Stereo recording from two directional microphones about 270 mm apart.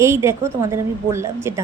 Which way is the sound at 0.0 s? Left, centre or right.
Centre.